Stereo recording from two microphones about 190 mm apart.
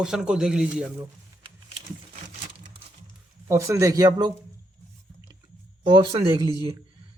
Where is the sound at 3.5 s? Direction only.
15° right (ahead or behind).